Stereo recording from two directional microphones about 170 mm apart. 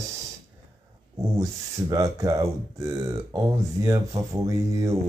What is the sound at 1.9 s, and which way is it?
Speech, 20° right (ahead or behind).